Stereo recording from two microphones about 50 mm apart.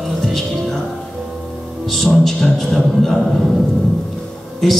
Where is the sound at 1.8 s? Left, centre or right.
Centre.